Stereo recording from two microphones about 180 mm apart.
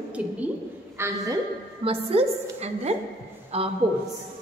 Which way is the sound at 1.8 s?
35° right (ahead or behind).